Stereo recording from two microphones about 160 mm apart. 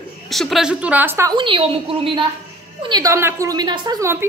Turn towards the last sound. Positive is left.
turn(degrees=-15)  # may be behind; listen again after turning